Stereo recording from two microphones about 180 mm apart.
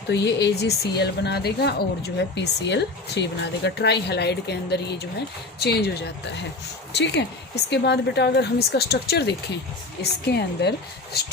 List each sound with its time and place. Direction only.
0.1 s a woman's voice: 75° left (ahead or behind)
6.9 s a woman's voice: 70° left (ahead or behind)